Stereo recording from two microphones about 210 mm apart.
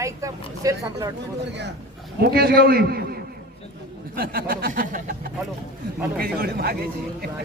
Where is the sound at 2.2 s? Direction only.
45° right (ahead or behind).